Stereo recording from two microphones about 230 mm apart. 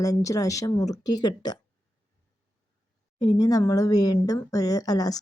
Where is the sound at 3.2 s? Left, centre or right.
Centre.